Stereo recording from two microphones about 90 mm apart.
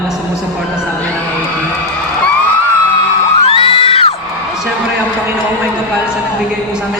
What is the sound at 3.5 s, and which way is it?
Music, 90° left.